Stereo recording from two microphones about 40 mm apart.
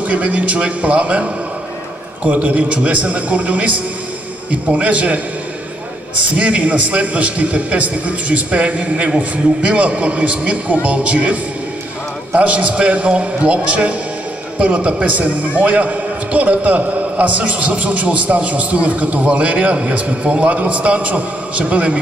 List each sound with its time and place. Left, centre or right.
0.0 s a man's voice: right
2.2 s a man's voice: right
6.3 s a man's voice: right
15.0 s a man's voice: right